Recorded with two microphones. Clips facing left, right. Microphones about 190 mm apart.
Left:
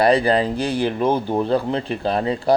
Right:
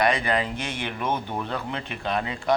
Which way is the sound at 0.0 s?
35° left (ahead or behind).